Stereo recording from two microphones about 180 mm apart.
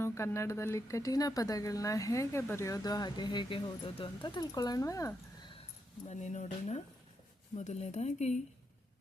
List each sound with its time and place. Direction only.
0.0 s speech: 15° left (ahead or behind)
6.1 s a woman's voice: 40° left (ahead or behind)